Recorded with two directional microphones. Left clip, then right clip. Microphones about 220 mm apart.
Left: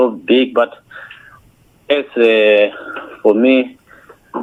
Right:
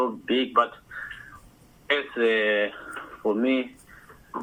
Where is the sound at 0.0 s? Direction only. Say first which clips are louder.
Left 12 dB; 55° left (ahead or behind).